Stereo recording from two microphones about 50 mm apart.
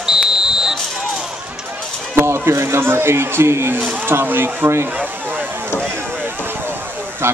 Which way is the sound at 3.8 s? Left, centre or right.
Right.